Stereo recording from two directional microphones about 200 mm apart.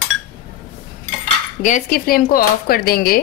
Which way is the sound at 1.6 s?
45° left (ahead or behind).